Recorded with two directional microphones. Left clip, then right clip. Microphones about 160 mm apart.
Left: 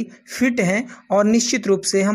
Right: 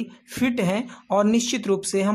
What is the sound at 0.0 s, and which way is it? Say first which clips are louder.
Speech: left 4 dB; 15° left (ahead or behind).